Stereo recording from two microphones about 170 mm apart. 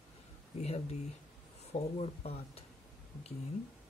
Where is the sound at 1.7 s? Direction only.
35° left (ahead or behind).